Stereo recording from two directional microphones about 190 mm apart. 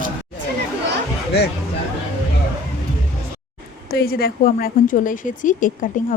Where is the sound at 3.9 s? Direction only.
55° left (ahead or behind).